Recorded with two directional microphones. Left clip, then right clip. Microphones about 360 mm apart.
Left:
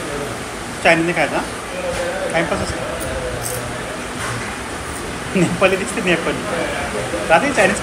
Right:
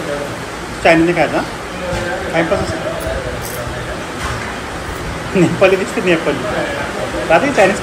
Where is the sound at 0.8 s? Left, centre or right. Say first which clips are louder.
Right 3 dB; centre.